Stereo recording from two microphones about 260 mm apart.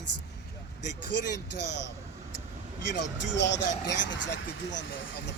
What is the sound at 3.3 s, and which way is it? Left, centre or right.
Speech, left.